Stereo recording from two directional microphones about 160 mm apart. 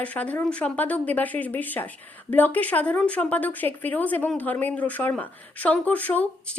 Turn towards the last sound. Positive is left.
turn(degrees=10)  # may be behind; listen again after turning